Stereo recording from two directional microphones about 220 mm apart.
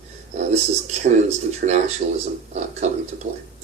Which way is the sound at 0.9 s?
30° right (ahead or behind).